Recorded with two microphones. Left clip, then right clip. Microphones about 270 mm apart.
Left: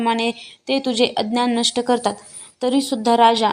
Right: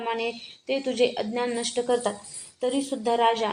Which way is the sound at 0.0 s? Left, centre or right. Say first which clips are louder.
Left 8 dB; left.